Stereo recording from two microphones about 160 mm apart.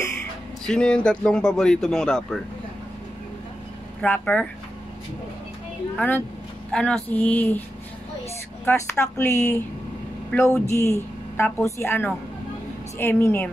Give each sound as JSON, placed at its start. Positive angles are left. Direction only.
{"t": 0.7, "sound": "speech", "side_deg": 5}
{"t": 4.0, "sound": "a woman's voice", "side_deg": 10}
{"t": 5.9, "sound": "a woman's voice", "side_deg": 10}
{"t": 9.0, "sound": "a woman's voice", "side_deg": 15}